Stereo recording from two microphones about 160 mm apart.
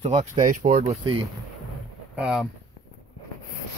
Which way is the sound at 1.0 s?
35° right (ahead or behind).